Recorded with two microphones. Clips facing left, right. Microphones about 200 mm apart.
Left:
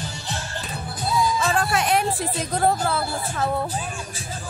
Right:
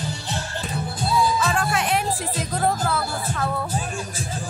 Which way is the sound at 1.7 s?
40° left (ahead or behind).